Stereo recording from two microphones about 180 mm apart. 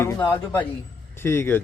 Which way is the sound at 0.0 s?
15° left (ahead or behind).